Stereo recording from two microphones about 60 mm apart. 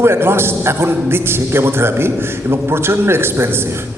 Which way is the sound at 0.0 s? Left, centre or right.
Right.